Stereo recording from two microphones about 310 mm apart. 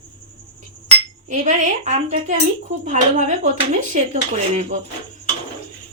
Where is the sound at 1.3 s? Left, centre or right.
Right.